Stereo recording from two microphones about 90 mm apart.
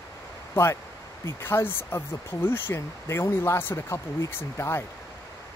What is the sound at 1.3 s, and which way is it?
Speech, 25° left (ahead or behind).